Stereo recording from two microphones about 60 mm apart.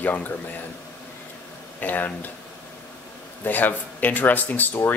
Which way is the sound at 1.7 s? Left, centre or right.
Left.